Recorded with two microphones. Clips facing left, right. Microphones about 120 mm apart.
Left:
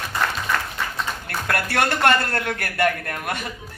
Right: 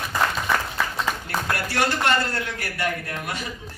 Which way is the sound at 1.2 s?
60° left (ahead or behind).